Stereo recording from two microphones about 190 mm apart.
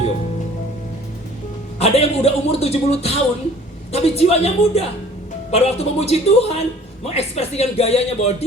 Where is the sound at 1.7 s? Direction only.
35° left (ahead or behind).